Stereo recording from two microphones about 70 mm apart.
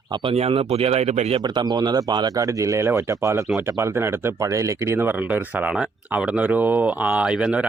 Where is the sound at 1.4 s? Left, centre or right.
Right.